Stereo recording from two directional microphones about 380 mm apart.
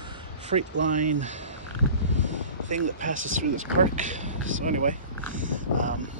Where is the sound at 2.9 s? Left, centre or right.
Centre.